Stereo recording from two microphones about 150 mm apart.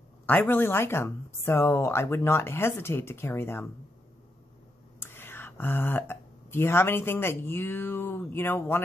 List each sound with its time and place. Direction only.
0.3 s speech: 15° left (ahead or behind)
5.0 s speech: 15° left (ahead or behind)